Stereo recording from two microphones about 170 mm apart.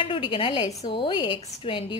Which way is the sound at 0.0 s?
30° left (ahead or behind).